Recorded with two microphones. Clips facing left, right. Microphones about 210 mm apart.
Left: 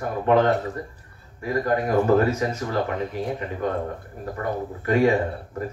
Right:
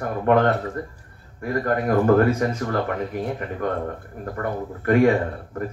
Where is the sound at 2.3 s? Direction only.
55° right (ahead or behind).